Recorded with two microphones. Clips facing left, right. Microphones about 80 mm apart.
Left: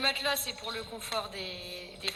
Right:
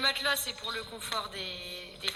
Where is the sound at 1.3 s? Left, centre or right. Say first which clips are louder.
Left 1 dB; right.